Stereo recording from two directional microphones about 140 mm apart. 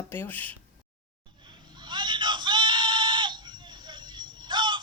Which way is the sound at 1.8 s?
35° right (ahead or behind).